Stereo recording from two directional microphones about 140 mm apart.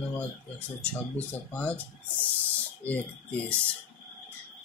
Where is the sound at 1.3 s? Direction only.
10° left (ahead or behind).